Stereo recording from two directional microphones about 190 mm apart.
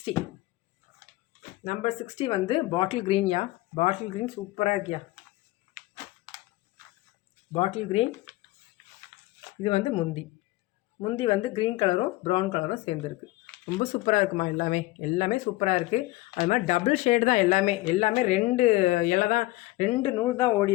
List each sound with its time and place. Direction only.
1.4 s a sound: 45° left (ahead or behind)
2.1 s speech: 30° left (ahead or behind)
7.5 s speech: 30° left (ahead or behind)
9.6 s speech: 30° left (ahead or behind)
11.0 s speech: 25° left (ahead or behind)
20.1 s speech: 20° left (ahead or behind)